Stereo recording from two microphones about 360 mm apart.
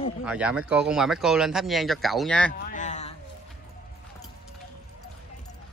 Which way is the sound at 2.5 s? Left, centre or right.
Left.